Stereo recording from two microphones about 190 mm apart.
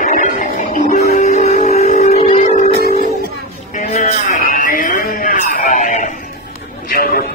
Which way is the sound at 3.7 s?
40° left (ahead or behind).